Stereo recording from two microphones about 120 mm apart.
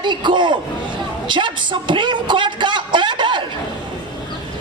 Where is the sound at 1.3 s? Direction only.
40° right (ahead or behind).